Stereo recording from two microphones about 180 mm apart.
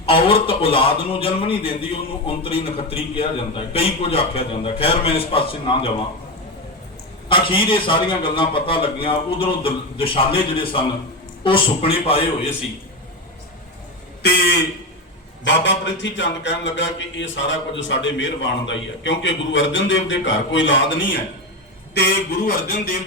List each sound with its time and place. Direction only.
0.0 s a man's voice: 30° left (ahead or behind)
7.3 s a man's voice: 30° left (ahead or behind)
14.2 s speech: 65° left (ahead or behind)
15.4 s speech: 75° left (ahead or behind)
21.9 s speech: 60° left (ahead or behind)